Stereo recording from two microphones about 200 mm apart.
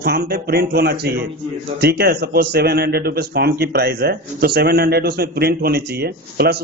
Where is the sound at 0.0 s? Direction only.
50° right (ahead or behind).